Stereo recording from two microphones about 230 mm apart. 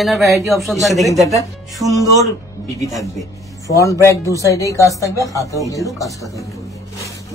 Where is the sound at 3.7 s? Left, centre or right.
Centre.